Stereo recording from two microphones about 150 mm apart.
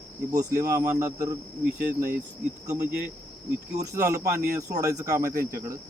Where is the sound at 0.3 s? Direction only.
25° right (ahead or behind).